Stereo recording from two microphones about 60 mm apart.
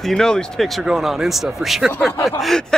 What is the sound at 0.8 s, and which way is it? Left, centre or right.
Speech, centre.